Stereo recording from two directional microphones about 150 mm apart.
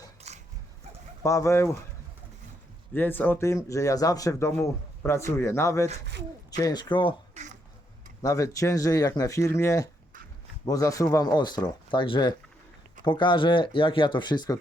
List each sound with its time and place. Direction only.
0.2 s a sound: 50° right (ahead or behind)
1.2 s a man's voice: 20° left (ahead or behind)
2.9 s a man's voice: 15° left (ahead or behind); by 7.1 s 30° left (ahead or behind)
8.2 s a man's voice: 20° left (ahead or behind)